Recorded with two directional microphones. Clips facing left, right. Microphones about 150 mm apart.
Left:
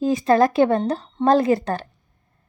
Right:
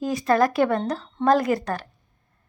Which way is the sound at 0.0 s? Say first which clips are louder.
Left 4 dB; 25° left (ahead or behind).